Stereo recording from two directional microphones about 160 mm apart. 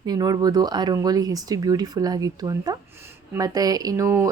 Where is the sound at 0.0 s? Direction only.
25° right (ahead or behind).